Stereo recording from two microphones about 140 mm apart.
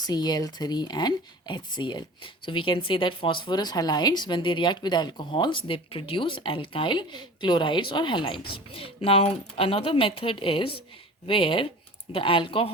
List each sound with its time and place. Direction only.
0.0 s speech: 30° left (ahead or behind)